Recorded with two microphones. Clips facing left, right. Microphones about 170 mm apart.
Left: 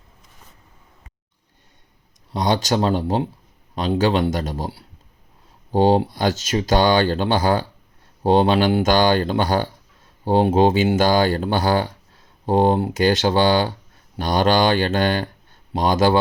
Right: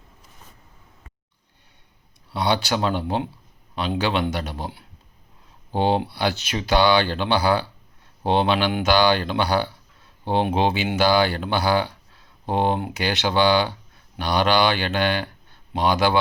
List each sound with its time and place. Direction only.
2.3 s speech: 40° left (ahead or behind)